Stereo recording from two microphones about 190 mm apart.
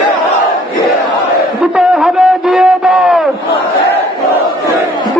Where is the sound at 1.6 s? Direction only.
5° right (ahead or behind).